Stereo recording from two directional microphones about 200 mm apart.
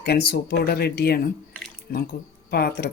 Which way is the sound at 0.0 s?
55° left (ahead or behind).